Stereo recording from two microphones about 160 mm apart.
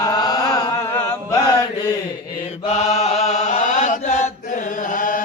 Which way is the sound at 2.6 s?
40° left (ahead or behind).